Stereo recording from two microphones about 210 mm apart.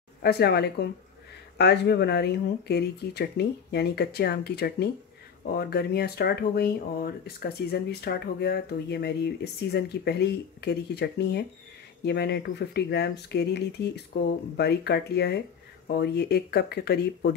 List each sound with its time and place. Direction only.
0.2 s speech: 50° left (ahead or behind)